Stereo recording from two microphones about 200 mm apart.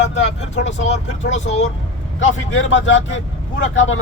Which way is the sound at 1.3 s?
35° left (ahead or behind).